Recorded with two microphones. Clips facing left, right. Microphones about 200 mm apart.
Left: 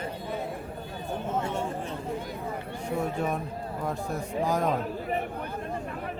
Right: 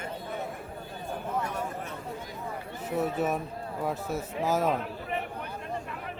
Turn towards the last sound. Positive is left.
turn(degrees=40)  # may be behind; listen again after turning